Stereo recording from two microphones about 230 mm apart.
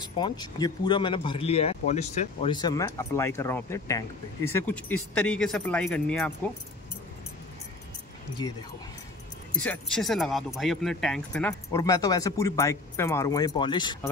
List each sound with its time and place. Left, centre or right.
0.0 s speech: centre
2.5 s speech: centre
9.5 s speech: centre
11.7 s speech: centre